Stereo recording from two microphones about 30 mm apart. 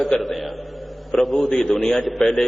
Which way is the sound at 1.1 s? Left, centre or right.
Centre.